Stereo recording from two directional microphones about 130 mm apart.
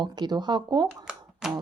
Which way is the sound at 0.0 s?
35° right (ahead or behind).